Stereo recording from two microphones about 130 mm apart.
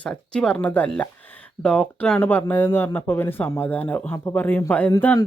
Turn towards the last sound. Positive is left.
turn(degrees=20)  # may be behind; listen again after turning